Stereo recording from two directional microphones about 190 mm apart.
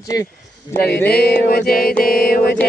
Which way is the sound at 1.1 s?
55° left (ahead or behind).